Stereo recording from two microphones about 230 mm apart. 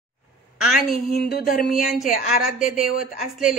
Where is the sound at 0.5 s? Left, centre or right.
Centre.